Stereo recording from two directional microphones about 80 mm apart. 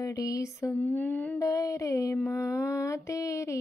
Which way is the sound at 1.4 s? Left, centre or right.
Left.